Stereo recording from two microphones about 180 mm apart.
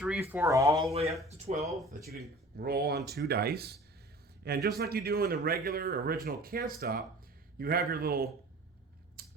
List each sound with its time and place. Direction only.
0.0 s speech: 5° right (ahead or behind)
1.5 s speech: 45° right (ahead or behind)
2.6 s speech: 60° right (ahead or behind)
9.2 s a sound: 60° right (ahead or behind)